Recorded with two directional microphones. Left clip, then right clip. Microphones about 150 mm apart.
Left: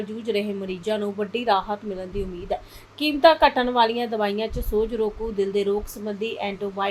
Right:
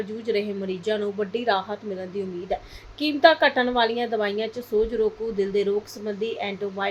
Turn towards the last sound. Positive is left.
turn(degrees=15)  # may be behind; listen again after turning